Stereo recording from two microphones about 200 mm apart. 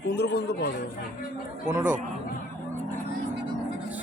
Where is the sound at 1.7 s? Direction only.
10° right (ahead or behind).